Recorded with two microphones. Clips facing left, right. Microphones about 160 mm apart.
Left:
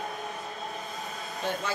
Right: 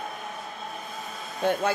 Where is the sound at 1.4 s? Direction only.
55° right (ahead or behind).